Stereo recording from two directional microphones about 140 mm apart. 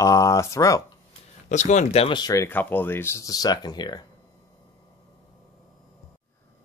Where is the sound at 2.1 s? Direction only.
25° left (ahead or behind).